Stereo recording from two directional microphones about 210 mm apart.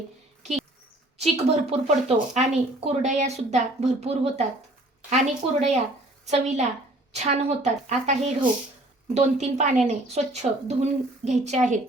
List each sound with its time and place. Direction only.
1.2 s speech: 30° right (ahead or behind)